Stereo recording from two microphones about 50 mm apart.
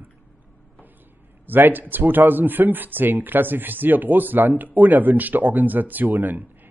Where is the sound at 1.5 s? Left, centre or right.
Right.